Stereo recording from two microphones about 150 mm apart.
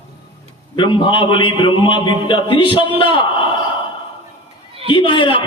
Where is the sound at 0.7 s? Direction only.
30° left (ahead or behind).